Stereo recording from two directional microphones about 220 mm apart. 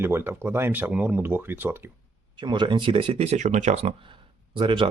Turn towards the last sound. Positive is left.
turn(degrees=-25)  # may be behind; listen again after turning